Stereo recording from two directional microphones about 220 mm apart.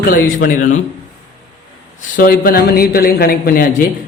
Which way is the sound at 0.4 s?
40° left (ahead or behind).